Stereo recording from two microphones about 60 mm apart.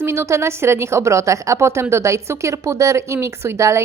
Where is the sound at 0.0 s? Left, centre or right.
Right.